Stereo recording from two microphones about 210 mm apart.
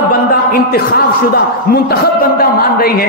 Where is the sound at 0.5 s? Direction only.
45° left (ahead or behind).